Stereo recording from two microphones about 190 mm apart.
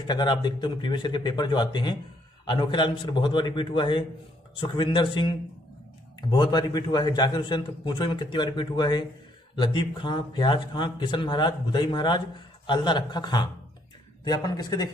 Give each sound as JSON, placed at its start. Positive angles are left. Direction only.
{"t": 0.0, "sound": "a man's voice", "side_deg": 20}